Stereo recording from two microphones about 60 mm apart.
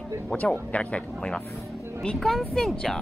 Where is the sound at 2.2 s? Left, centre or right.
Centre.